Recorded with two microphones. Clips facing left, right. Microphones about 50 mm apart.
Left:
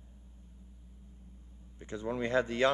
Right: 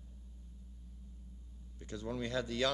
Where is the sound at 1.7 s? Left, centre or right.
Left.